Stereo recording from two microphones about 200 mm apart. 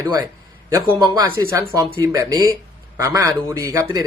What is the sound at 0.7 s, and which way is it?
Speech, 20° right (ahead or behind).